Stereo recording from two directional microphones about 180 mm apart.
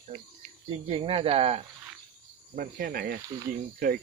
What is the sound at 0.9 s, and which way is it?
Speech, 30° right (ahead or behind).